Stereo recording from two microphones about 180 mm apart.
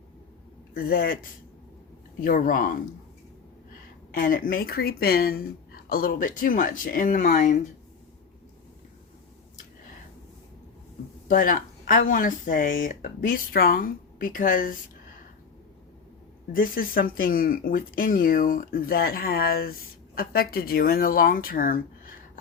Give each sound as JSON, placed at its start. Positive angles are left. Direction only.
{"t": 0.7, "sound": "speech", "side_deg": 55}
{"t": 2.2, "sound": "speech", "side_deg": 50}
{"t": 4.1, "sound": "speech", "side_deg": 50}
{"t": 11.3, "sound": "speech", "side_deg": 50}
{"t": 16.5, "sound": "speech", "side_deg": 50}